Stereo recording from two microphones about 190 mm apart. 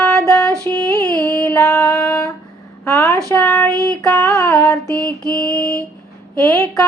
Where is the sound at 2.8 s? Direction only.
15° left (ahead or behind).